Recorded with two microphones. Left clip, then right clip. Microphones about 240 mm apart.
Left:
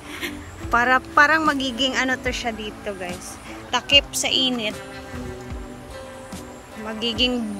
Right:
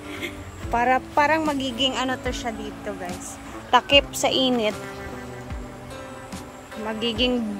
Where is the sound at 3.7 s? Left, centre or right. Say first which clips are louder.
Right 1 dB; centre.